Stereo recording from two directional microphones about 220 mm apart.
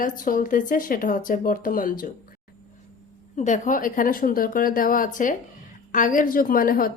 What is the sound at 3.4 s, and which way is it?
A woman's voice, 35° left (ahead or behind).